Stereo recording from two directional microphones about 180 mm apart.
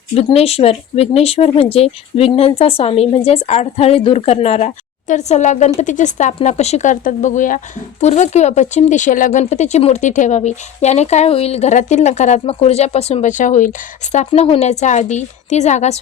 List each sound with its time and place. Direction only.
0.1 s speech: 35° left (ahead or behind)